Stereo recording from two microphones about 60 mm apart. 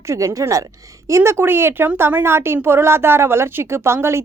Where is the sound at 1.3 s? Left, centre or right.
Right.